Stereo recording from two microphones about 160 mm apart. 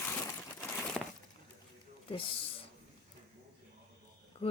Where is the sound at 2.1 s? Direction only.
35° left (ahead or behind).